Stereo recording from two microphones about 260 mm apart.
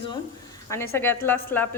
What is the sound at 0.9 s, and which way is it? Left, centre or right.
Speech, centre.